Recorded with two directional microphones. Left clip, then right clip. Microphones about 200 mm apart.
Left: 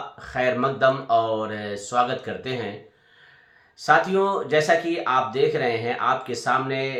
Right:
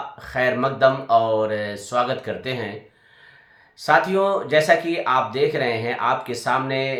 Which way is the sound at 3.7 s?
15° right (ahead or behind).